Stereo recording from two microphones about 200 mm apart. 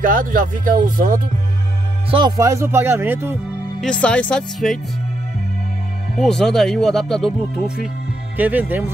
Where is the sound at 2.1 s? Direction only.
20° right (ahead or behind).